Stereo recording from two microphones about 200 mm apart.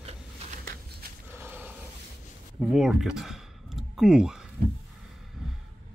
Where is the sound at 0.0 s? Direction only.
40° right (ahead or behind).